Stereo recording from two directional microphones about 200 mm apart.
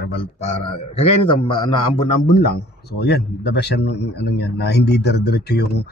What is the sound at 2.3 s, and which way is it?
A man's voice, 55° left (ahead or behind).